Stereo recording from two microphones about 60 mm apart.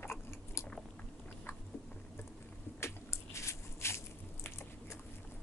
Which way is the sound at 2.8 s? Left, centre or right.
Left.